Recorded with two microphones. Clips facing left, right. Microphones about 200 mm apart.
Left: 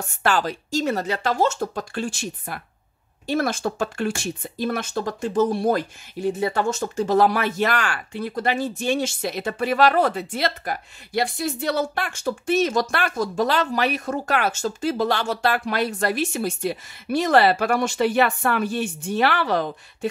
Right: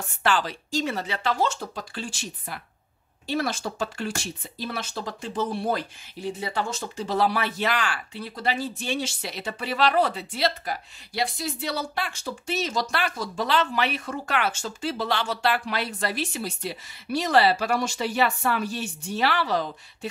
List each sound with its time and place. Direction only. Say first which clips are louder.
0.2 s speech: left 3 dB; 45° left (ahead or behind)